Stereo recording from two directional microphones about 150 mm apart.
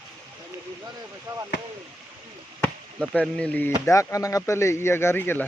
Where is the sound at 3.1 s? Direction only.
5° left (ahead or behind).